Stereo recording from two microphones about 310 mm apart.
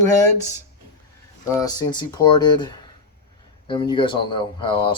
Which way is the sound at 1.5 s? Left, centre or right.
Centre.